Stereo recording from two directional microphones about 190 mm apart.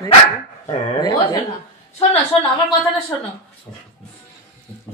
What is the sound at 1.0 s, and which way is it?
Speech, 20° left (ahead or behind).